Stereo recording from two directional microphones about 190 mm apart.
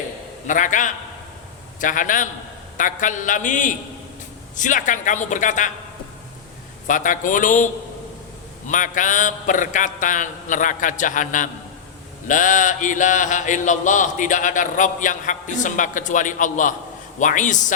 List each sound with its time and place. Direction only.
0.4 s mantra: 40° left (ahead or behind)
4.5 s speech: 40° left (ahead or behind)
6.8 s mantra: 45° left (ahead or behind)
17.2 s speech: 40° left (ahead or behind)